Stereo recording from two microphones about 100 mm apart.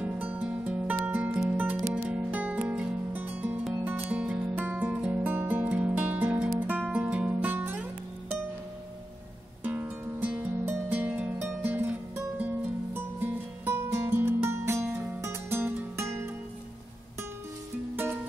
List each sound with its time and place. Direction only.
0.0 s music: 15° right (ahead or behind)
9.6 s music: 15° right (ahead or behind)